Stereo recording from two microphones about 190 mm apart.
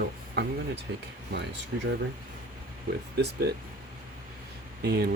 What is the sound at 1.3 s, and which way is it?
Speech, 65° right (ahead or behind).